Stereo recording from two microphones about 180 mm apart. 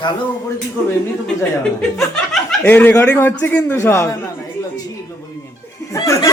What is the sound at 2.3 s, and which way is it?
Speech, 5° left (ahead or behind).